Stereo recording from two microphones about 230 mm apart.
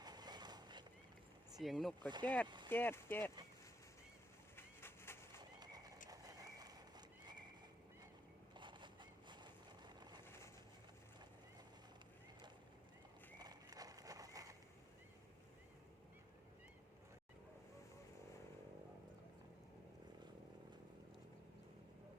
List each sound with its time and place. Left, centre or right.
0.0 s a sound: centre
1.5 s speech: centre
2.0 s speech: centre
2.2 s speech: centre
4.5 s bird: centre
5.4 s horse: centre
8.5 s vehicle: right
10.2 s vehicle: centre
13.4 s horse: centre